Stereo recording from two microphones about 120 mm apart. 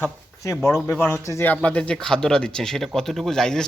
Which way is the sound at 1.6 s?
10° left (ahead or behind).